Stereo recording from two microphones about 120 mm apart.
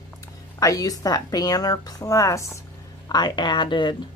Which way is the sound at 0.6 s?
30° left (ahead or behind).